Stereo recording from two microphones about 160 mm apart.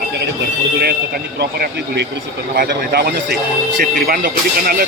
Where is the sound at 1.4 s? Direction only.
90° right.